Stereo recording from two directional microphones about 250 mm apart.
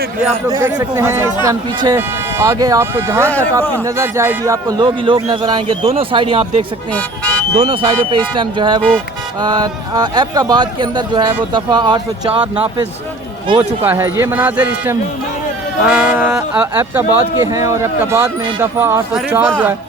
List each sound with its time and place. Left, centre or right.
0.4 s speech: centre
3.2 s speech: centre
3.8 s speech: centre
6.9 s speech: centre
7.5 s speech: right
13.5 s speech: centre